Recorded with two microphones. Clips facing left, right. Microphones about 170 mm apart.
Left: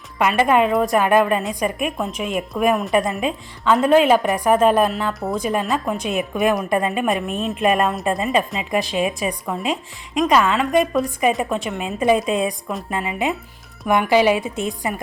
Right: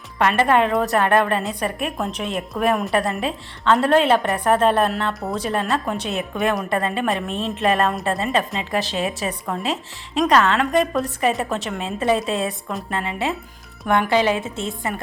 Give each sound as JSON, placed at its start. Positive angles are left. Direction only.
{"t": 0.2, "sound": "a woman's voice", "side_deg": 10}
{"t": 6.7, "sound": "a woman's voice", "side_deg": 15}